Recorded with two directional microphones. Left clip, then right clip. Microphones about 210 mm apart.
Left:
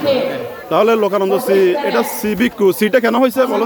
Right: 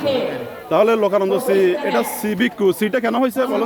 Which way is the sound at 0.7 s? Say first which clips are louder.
Left 2 dB; centre (ahead or behind).